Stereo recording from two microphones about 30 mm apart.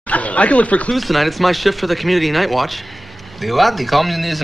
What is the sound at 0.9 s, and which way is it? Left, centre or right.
Speech, centre.